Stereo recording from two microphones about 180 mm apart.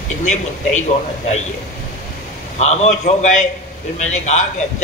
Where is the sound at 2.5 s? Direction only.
40° left (ahead or behind).